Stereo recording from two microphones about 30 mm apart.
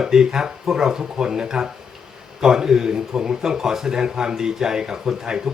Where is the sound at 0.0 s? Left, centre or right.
Right.